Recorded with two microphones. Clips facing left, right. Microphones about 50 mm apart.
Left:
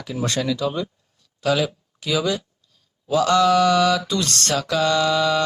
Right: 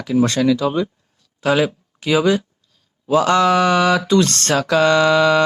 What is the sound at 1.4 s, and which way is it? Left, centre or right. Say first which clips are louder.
Speech: right 4 dB; right.